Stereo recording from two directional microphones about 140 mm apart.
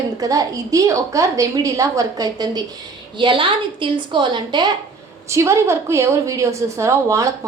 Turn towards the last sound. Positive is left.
turn(degrees=-20)  # may be behind; listen again after turning